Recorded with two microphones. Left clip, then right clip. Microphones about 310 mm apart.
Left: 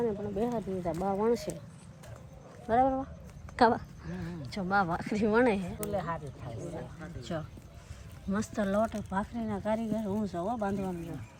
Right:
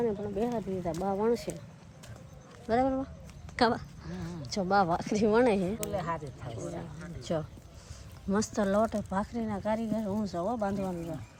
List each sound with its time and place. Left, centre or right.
0.0 s speech: centre
2.6 s a woman's voice: centre
5.9 s speech: right
7.2 s speech: centre